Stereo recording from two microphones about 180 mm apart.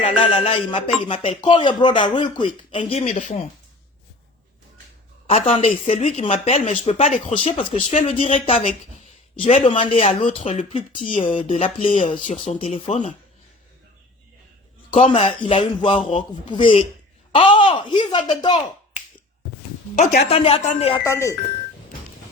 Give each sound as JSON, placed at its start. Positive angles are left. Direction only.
{"t": 0.2, "sound": "speech", "side_deg": 35}
{"t": 5.3, "sound": "speech", "side_deg": 35}
{"t": 11.8, "sound": "speech", "side_deg": 45}
{"t": 14.8, "sound": "speech", "side_deg": 35}
{"t": 20.0, "sound": "speech", "side_deg": 40}
{"t": 21.0, "sound": "speech", "side_deg": 15}